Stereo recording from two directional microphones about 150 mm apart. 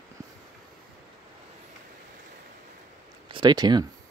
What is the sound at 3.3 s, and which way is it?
Speech, 30° right (ahead or behind).